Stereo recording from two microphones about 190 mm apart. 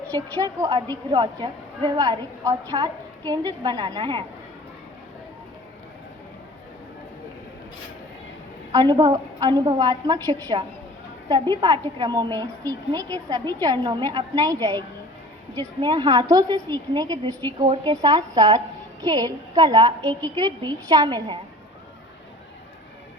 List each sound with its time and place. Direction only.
0.1 s a woman's voice: 15° right (ahead or behind)
8.7 s a woman's voice: 20° right (ahead or behind)
11.6 s a woman's voice: 20° right (ahead or behind)